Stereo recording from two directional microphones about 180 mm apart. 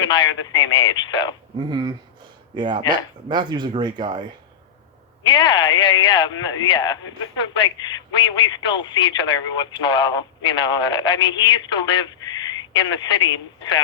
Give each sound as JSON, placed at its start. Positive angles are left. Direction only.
{"t": 0.4, "sound": "speech", "side_deg": 25}
{"t": 1.5, "sound": "speech", "side_deg": -20}
{"t": 5.2, "sound": "speech", "side_deg": 25}